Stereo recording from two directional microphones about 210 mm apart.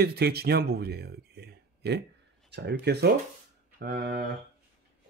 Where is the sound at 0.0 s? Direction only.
50° right (ahead or behind).